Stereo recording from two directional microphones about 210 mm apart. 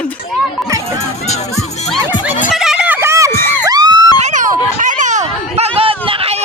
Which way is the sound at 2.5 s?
Centre (ahead or behind).